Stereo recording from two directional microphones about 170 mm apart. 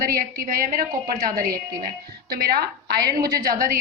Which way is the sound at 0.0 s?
60° right (ahead or behind).